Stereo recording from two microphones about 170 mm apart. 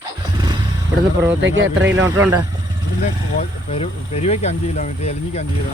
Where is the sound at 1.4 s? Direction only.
90° right.